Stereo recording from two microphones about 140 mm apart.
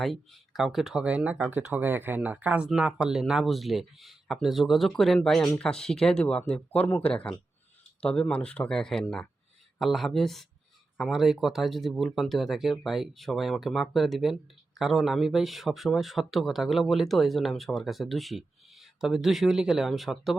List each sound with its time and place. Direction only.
0.0 s speech: centre (ahead or behind)